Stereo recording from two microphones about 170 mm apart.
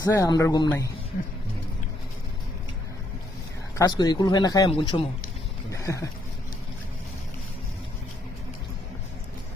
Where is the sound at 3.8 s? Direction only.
25° left (ahead or behind).